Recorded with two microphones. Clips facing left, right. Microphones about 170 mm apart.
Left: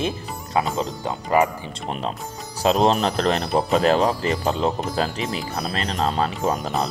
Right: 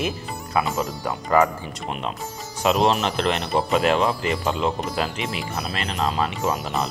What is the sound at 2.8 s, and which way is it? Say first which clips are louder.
Speech: left 2 dB; 35° left (ahead or behind).